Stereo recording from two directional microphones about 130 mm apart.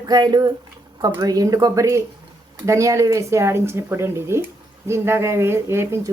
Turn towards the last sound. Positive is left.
turn(degrees=-20)  # may be behind; listen again after turning